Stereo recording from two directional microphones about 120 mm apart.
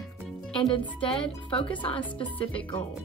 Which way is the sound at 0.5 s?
45° left (ahead or behind).